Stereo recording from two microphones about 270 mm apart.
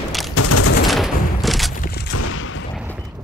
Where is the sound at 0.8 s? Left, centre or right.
Centre.